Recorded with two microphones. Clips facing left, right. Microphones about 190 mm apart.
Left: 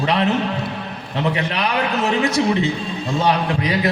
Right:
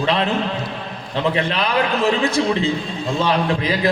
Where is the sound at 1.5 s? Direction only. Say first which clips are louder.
Right 1 dB; 30° right (ahead or behind).